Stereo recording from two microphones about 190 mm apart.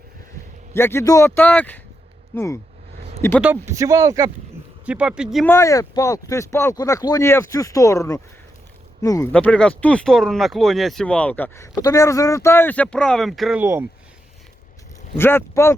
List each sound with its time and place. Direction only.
0.7 s speech: 10° left (ahead or behind)
3.4 s speech: 10° right (ahead or behind)
4.9 s speech: 5° right (ahead or behind)
5.5 s speech: 15° left (ahead or behind); by 13.7 s centre (ahead or behind)
15.1 s speech: 10° left (ahead or behind)